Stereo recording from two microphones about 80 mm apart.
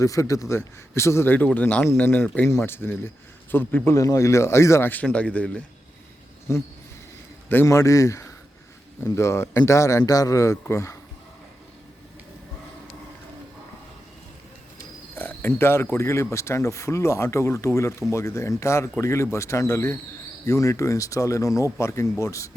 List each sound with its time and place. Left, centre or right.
0.0 s speech: left
1.5 s speech: centre
2.6 s speech: left
3.9 s speech: left
5.0 s a man's voice: centre
6.5 s speech: left
7.7 s speech: left
15.1 s speech: left